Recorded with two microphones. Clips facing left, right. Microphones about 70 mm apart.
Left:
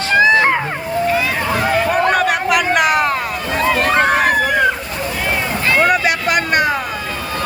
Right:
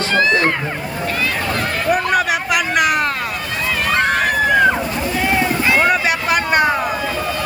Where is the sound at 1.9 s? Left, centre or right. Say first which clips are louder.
Right 3 dB; centre.